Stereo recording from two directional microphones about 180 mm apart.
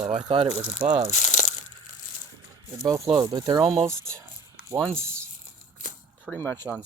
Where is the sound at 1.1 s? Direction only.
40° left (ahead or behind).